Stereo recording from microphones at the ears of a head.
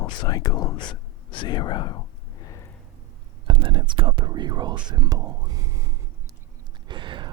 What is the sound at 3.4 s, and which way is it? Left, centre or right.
Speech, right.